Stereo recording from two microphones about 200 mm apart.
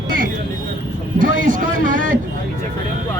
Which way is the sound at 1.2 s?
40° right (ahead or behind).